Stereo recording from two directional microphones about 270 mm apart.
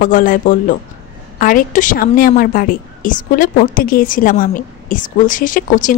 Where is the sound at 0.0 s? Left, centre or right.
Left.